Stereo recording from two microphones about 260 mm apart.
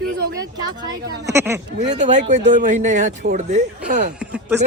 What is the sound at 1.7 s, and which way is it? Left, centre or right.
Speech, right.